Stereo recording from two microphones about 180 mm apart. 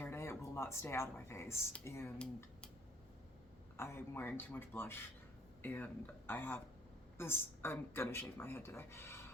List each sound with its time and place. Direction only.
0.0 s speech: 15° left (ahead or behind)
3.8 s speech: 15° left (ahead or behind)